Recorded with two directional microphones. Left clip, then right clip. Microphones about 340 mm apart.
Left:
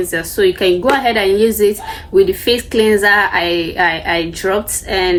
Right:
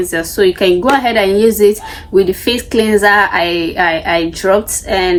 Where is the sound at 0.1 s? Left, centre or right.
Centre.